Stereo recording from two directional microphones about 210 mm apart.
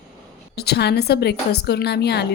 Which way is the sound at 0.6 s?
50° left (ahead or behind).